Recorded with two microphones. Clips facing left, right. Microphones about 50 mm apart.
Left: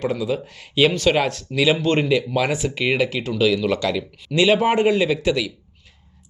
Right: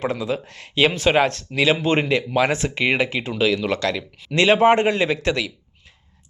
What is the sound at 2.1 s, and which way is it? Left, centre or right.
Speech, right.